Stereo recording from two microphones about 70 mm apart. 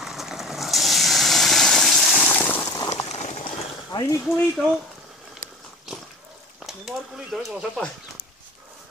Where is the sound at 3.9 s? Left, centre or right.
Left.